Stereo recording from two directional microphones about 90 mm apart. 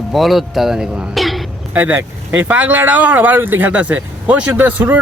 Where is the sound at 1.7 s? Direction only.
20° right (ahead or behind).